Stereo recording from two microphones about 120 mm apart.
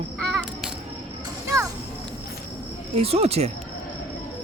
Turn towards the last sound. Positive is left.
turn(degrees=-60)  # may be behind; listen again after turning